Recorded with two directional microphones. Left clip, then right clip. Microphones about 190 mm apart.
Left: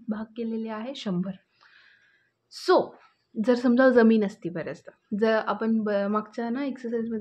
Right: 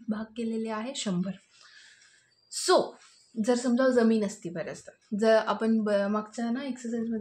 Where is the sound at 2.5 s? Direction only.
20° left (ahead or behind).